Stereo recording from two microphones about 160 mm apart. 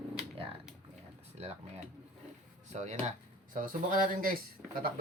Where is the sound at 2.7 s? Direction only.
45° right (ahead or behind).